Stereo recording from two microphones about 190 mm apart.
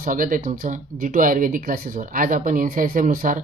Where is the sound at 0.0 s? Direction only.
45° right (ahead or behind).